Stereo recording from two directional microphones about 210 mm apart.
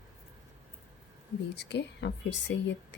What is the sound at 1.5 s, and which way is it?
Speech, 55° left (ahead or behind).